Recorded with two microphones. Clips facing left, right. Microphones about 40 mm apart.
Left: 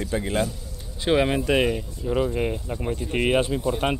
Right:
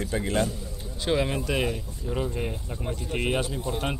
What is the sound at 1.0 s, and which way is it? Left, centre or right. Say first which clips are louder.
A man's voice: left 5 dB; left.